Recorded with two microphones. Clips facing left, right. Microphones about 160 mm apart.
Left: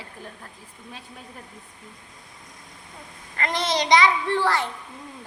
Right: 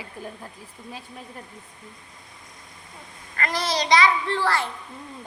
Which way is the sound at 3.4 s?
20° left (ahead or behind).